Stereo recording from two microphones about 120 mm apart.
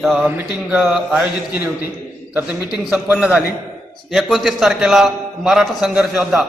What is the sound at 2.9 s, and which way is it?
Speech, 10° right (ahead or behind).